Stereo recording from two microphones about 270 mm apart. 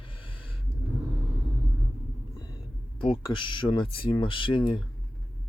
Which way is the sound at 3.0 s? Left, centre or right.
Centre.